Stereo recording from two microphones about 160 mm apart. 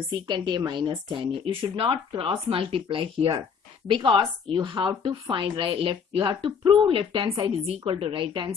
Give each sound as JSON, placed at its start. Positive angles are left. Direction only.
{"t": 0.3, "sound": "speech", "side_deg": -25}